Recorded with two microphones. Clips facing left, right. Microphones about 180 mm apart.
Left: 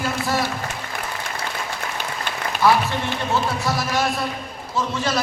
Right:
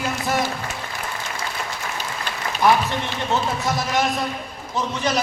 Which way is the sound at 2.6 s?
20° right (ahead or behind).